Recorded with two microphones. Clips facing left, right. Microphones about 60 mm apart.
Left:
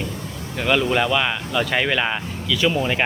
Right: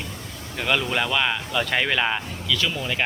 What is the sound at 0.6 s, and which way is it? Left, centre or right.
Speech, centre.